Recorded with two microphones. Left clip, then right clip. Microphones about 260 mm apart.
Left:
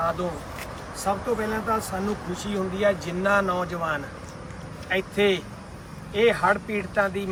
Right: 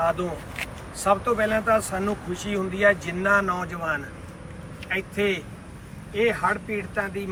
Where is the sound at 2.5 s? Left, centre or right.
Centre.